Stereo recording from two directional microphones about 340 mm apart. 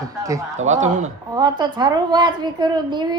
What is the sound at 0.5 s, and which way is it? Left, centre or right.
A woman's voice, right.